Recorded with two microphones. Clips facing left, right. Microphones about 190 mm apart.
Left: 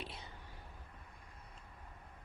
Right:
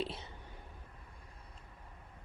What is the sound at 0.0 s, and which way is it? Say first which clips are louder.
Whispering: right 9 dB; 25° right (ahead or behind).